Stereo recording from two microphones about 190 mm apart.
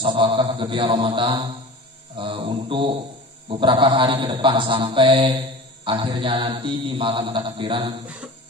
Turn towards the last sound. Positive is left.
turn(degrees=-25)  # may be behind; listen again after turning